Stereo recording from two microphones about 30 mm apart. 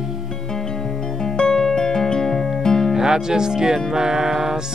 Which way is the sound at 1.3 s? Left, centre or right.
Left.